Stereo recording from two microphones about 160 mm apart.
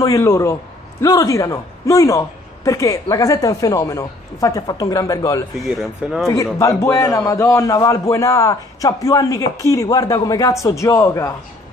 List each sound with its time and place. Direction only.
0.0 s a man's voice: 20° left (ahead or behind)
5.7 s speech: centre (ahead or behind)
6.2 s a man's voice: 20° left (ahead or behind)